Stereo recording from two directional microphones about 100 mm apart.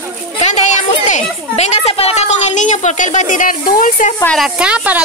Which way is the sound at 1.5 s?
85° left.